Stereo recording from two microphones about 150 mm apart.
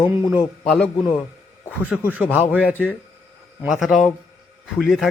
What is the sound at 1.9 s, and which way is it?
Speech, 5° right (ahead or behind).